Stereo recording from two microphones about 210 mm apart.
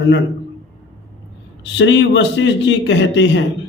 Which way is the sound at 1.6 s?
60° left (ahead or behind).